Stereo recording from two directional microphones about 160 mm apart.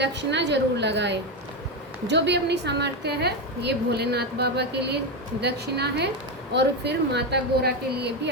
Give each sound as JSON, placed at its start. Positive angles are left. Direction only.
{"t": 0.0, "sound": "a woman's voice", "side_deg": -90}